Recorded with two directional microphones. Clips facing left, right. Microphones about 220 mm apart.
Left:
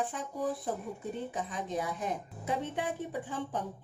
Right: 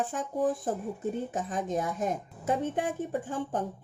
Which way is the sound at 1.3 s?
45° right (ahead or behind).